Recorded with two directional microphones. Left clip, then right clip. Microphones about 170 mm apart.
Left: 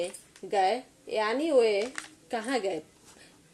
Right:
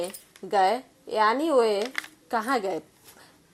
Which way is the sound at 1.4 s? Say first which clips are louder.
Right 2 dB; 20° right (ahead or behind).